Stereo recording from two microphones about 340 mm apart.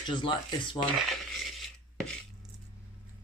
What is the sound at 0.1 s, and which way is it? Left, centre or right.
Speech, centre.